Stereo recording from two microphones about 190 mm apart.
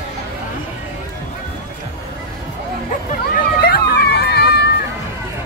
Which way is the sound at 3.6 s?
55° left (ahead or behind).